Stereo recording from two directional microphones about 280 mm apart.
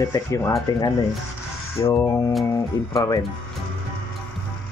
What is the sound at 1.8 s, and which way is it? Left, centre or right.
Speech, centre.